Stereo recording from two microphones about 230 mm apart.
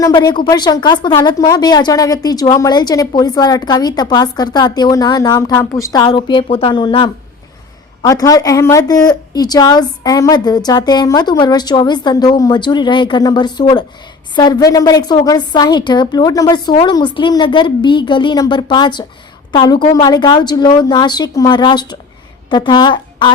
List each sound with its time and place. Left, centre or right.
0.0 s a woman's voice: centre